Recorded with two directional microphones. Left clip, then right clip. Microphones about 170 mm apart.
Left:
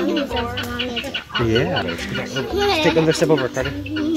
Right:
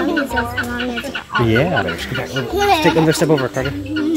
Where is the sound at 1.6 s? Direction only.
45° right (ahead or behind).